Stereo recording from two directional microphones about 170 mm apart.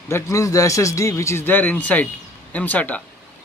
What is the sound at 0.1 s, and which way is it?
Speech, 20° left (ahead or behind).